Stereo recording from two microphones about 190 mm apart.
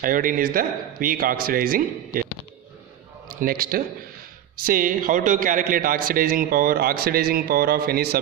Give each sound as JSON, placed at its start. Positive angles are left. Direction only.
{"t": 0.0, "sound": "a man's voice", "side_deg": -45}
{"t": 3.3, "sound": "a man's voice", "side_deg": -50}